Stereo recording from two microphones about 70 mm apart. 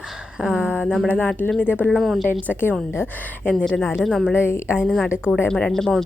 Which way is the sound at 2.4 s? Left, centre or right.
Left.